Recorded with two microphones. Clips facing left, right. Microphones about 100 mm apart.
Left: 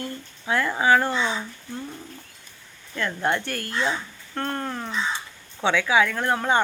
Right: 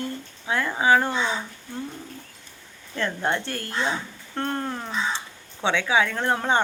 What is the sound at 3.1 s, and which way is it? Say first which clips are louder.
Speech: left 2 dB; 15° right (ahead or behind).